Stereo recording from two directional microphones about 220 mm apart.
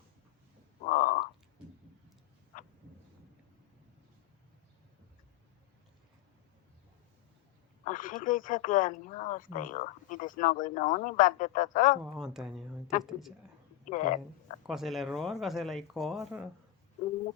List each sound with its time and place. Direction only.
0.9 s crow: 35° left (ahead or behind)
7.9 s speech: 35° left (ahead or behind)
12.0 s speech: 5° right (ahead or behind)
13.8 s speech: 35° left (ahead or behind)
14.7 s speech: centre (ahead or behind)